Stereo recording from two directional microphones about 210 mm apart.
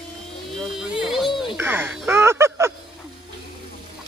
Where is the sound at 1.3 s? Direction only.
20° left (ahead or behind).